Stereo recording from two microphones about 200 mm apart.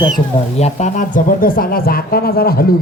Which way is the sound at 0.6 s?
35° left (ahead or behind).